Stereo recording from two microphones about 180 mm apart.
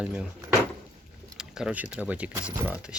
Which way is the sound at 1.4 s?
5° right (ahead or behind).